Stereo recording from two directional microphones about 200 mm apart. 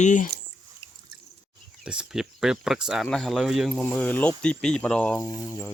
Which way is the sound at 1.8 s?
5° right (ahead or behind).